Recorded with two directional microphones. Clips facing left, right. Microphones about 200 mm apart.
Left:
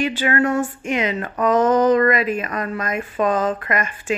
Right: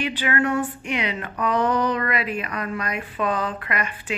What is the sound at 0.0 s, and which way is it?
A woman's voice, 45° left (ahead or behind).